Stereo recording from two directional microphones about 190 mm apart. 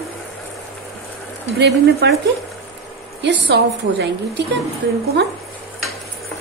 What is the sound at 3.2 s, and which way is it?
Speech, 65° right (ahead or behind).